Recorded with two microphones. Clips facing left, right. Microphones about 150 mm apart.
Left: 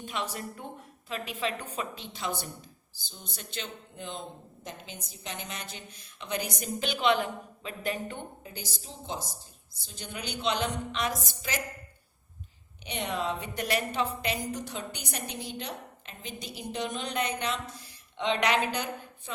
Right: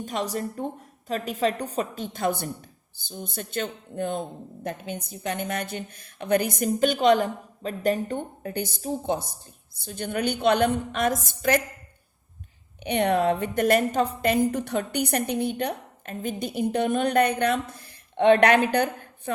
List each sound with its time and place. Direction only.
0.0 s a woman's voice: 40° right (ahead or behind)
8.4 s a woman's voice: 60° right (ahead or behind)
12.8 s a woman's voice: 60° right (ahead or behind)